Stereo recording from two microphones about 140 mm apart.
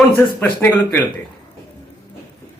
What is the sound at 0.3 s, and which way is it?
Speech, 15° left (ahead or behind).